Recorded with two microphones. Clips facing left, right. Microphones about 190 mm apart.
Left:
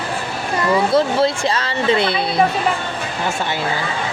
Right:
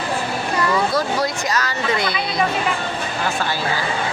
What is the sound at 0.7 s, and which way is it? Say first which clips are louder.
Speech: left 7 dB; 25° left (ahead or behind).